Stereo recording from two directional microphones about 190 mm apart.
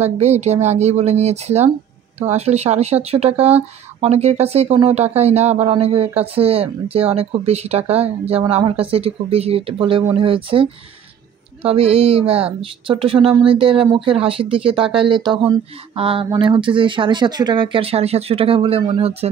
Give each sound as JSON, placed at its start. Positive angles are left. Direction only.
{"t": 0.0, "sound": "speech", "side_deg": -35}